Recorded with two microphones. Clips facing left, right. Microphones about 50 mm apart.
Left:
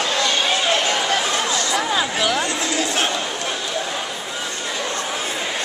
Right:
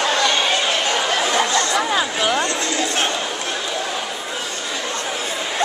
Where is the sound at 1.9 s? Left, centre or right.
Centre.